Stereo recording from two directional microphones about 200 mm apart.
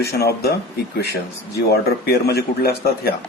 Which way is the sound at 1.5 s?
50° left (ahead or behind).